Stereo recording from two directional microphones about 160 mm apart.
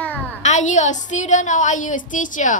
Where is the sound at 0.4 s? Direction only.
50° left (ahead or behind).